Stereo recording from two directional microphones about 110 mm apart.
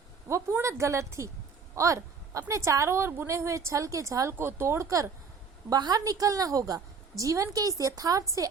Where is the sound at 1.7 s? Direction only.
30° right (ahead or behind).